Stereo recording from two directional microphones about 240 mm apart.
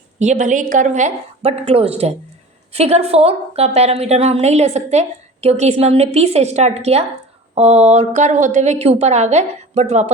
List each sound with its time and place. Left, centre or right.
0.2 s a woman's voice: right